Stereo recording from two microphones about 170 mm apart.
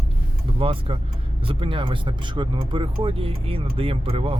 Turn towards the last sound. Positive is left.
turn(degrees=-35)  # may be behind; listen again after turning